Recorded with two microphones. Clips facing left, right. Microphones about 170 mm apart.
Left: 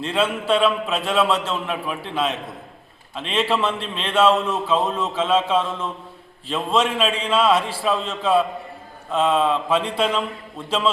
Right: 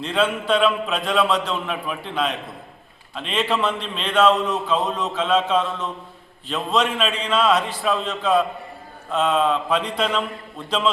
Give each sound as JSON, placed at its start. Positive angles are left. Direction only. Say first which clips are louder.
{"t": 0.0, "sound": "a man's voice", "louder": "even", "side_deg": 5}